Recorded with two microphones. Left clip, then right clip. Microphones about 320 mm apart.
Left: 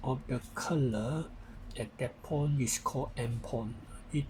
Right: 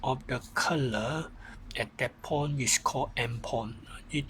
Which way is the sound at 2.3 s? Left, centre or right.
Right.